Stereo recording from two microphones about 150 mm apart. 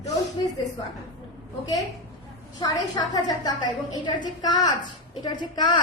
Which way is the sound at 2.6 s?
25° left (ahead or behind).